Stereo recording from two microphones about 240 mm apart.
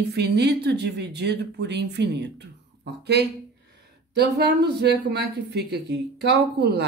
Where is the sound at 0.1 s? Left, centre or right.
Right.